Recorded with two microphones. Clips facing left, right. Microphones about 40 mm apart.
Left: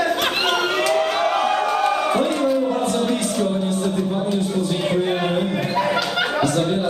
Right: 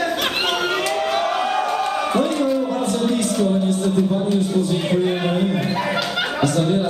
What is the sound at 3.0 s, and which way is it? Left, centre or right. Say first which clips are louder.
Music: right 2 dB; centre.